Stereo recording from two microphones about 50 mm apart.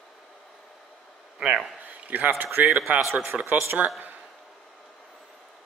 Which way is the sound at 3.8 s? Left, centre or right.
Right.